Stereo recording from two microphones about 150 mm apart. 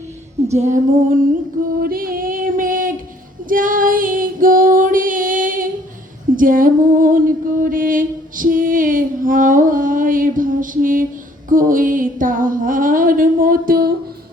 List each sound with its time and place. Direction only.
0.5 s female singing: 50° right (ahead or behind)
1.8 s female singing: 75° right (ahead or behind)
6.3 s a sound: 65° right (ahead or behind)